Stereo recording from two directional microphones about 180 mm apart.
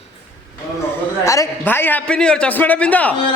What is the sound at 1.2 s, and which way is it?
A man's voice, 15° left (ahead or behind).